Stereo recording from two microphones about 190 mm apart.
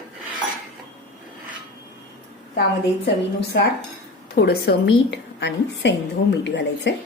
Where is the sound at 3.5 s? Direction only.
60° left (ahead or behind).